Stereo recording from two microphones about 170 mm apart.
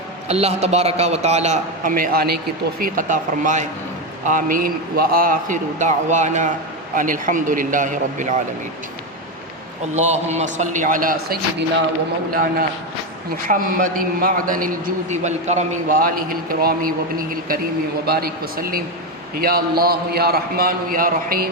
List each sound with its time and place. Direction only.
0.3 s a man's voice: 35° right (ahead or behind)
9.9 s a man's voice: 40° right (ahead or behind); by 21.5 s 60° right (ahead or behind)